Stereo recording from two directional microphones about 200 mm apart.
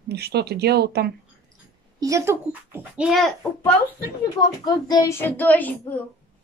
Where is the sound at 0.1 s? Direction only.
55° right (ahead or behind).